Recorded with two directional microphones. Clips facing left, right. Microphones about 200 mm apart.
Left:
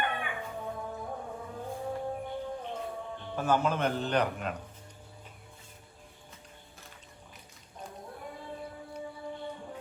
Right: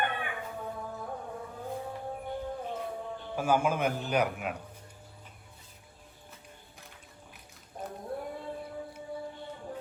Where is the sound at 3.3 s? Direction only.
10° right (ahead or behind).